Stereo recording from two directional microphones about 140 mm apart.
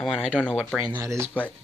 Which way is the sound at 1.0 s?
20° right (ahead or behind).